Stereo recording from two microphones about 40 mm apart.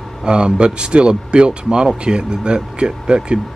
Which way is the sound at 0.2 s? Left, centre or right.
Right.